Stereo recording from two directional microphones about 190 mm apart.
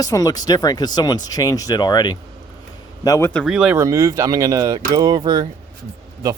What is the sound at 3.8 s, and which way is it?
Speech, 15° right (ahead or behind).